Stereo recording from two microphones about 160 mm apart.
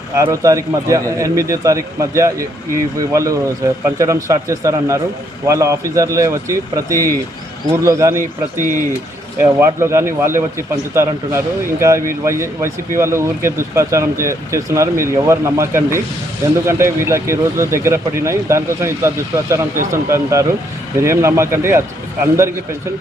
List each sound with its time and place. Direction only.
0.2 s a man's voice: 20° right (ahead or behind)
9.4 s a man's voice: 15° right (ahead or behind)